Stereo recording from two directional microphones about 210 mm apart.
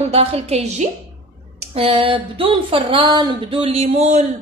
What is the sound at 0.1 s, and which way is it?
A woman's voice, 30° right (ahead or behind).